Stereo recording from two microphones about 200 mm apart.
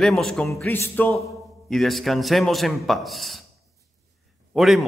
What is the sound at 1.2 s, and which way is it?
A man's voice, centre (ahead or behind).